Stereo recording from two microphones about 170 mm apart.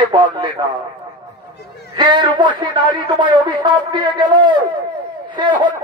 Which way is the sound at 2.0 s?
25° right (ahead or behind).